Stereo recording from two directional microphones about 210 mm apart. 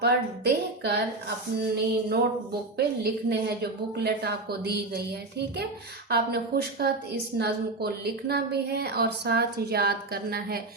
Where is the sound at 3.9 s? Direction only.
50° right (ahead or behind).